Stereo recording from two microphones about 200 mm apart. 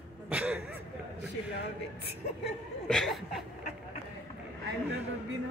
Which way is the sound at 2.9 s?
Centre (ahead or behind).